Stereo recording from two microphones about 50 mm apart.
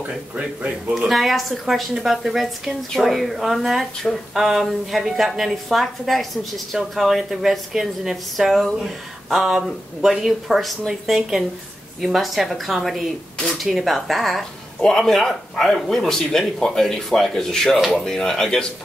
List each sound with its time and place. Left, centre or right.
0.6 s speech: right
0.9 s a woman's voice: centre